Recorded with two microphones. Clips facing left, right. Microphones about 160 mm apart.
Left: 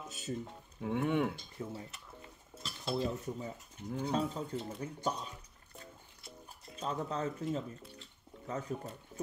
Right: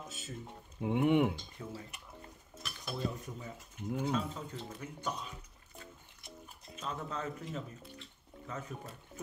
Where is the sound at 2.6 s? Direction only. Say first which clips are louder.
Left 4 dB; 25° left (ahead or behind).